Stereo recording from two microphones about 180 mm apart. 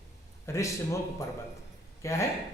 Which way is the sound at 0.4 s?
15° left (ahead or behind).